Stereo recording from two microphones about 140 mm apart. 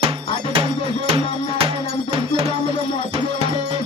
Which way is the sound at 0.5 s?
45° right (ahead or behind).